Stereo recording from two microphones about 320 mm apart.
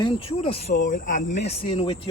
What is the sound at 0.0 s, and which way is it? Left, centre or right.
Speech, centre.